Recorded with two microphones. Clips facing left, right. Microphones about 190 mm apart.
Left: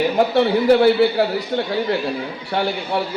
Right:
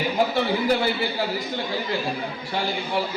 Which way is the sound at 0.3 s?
65° left (ahead or behind).